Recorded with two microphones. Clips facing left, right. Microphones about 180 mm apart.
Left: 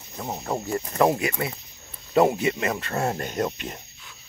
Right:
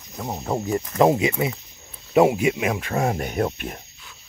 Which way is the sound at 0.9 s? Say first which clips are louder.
Right 4 dB; 20° right (ahead or behind).